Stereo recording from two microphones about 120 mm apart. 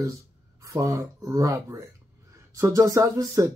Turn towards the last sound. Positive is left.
turn(degrees=-25)  # may be behind; listen again after turning